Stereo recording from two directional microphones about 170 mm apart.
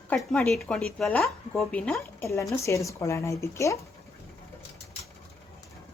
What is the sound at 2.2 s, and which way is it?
Speech, 15° left (ahead or behind).